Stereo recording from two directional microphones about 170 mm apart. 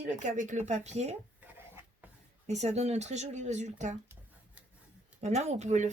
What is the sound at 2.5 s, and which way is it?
Speech, 40° right (ahead or behind).